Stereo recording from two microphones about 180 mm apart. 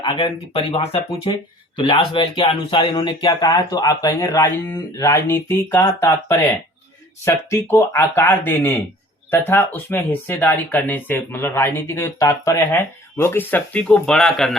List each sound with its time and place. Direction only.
0.0 s speech: 25° left (ahead or behind); by 14.5 s centre (ahead or behind)